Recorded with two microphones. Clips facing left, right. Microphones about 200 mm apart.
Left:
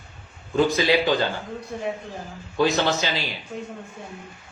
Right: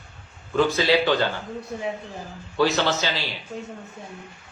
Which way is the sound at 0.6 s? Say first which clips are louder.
Even; 15° left (ahead or behind).